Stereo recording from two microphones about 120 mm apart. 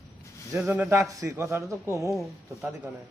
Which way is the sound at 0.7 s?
20° right (ahead or behind).